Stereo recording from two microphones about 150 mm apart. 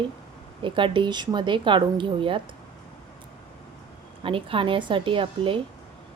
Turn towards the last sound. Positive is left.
turn(degrees=-35)  # may be behind; listen again after turning